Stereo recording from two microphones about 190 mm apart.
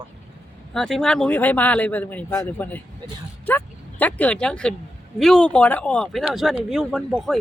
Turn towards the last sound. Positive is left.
turn(degrees=0)  # may be behind; listen again after turning